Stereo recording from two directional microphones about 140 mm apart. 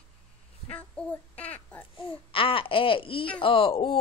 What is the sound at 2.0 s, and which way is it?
Babbling, 40° left (ahead or behind).